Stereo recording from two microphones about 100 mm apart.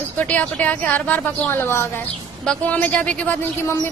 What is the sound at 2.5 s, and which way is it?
Speech, 15° left (ahead or behind).